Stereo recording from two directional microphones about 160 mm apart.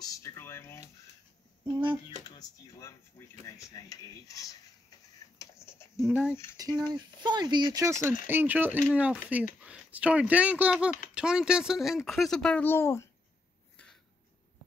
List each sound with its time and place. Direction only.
0.0 s speech: 20° left (ahead or behind)
1.7 s speech: 30° right (ahead or behind)
2.2 s speech: 25° left (ahead or behind)
5.4 s typing: 15° left (ahead or behind)
5.9 s speech: 10° right (ahead or behind)
6.5 s speech: 25° right (ahead or behind); by 13.1 s 15° left (ahead or behind)